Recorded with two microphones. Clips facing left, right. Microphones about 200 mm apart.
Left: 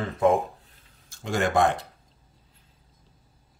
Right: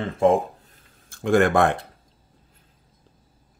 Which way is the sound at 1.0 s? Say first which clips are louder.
Right 8 dB; 55° right (ahead or behind).